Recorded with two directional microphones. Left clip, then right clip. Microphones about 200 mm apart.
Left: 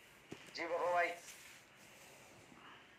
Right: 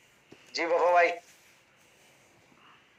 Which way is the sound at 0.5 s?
45° right (ahead or behind).